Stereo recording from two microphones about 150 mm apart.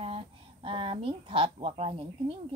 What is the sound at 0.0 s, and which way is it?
A woman's voice, 40° right (ahead or behind).